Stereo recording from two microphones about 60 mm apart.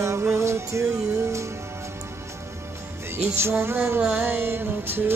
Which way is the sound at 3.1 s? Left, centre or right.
Right.